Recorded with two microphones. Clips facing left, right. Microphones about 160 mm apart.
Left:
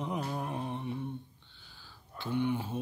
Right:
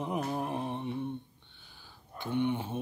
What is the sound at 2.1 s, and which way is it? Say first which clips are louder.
Mantra: right 1 dB; 20° right (ahead or behind).